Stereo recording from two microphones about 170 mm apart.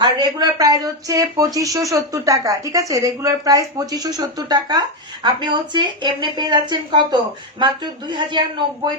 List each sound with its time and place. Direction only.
0.0 s speech: 25° right (ahead or behind)